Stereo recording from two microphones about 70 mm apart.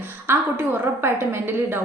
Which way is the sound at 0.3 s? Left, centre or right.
Right.